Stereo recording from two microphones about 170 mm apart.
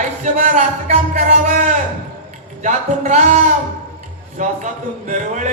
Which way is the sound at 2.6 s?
45° right (ahead or behind).